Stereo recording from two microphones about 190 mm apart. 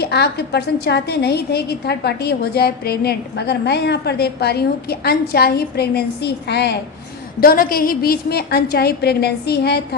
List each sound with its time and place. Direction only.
0.0 s a woman's voice: 60° left (ahead or behind)
7.4 s a woman's voice: 50° left (ahead or behind)